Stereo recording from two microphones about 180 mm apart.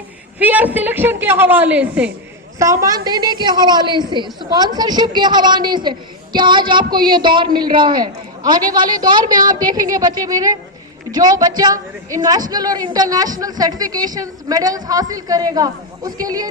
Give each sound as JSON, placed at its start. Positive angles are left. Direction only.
{"t": 0.3, "sound": "a man's voice", "side_deg": -10}
{"t": 2.6, "sound": "a woman's voice", "side_deg": -20}